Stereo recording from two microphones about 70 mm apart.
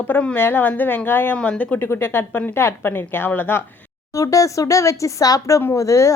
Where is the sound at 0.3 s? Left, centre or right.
Left.